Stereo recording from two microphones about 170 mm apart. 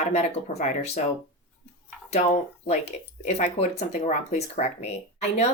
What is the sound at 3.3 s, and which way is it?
A woman's voice, 45° left (ahead or behind).